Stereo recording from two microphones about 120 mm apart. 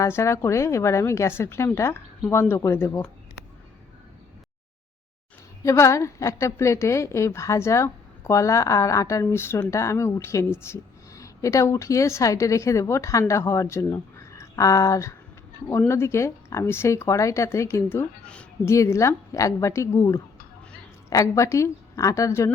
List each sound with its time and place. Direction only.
0.0 s speech: 25° left (ahead or behind)
5.6 s speech: 25° left (ahead or behind)